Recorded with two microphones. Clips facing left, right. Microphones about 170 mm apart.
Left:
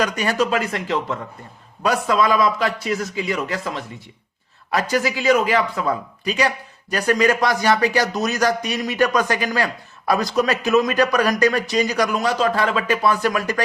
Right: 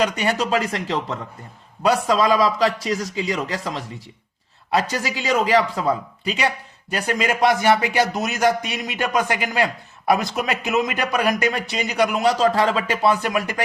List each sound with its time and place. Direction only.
0.0 s a man's voice: 30° right (ahead or behind)